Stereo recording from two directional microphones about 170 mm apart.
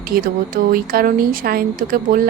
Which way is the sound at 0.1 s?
60° right (ahead or behind).